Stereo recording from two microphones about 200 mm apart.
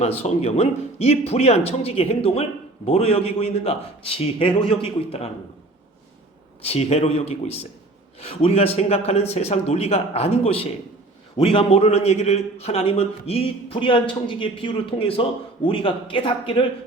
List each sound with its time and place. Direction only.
0.2 s a man's voice: 30° left (ahead or behind)
6.6 s a man's voice: 30° left (ahead or behind)